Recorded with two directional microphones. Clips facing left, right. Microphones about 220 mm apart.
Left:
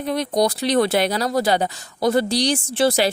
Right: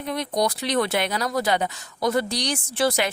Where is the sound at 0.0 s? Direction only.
35° left (ahead or behind).